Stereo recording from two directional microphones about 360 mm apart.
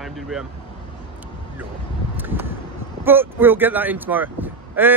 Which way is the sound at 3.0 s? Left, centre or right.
Centre.